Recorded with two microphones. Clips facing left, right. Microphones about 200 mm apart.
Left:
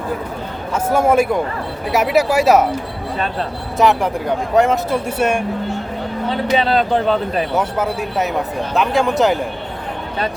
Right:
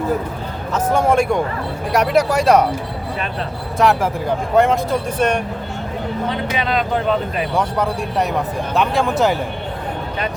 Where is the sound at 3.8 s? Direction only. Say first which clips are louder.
Left 1 dB; centre (ahead or behind).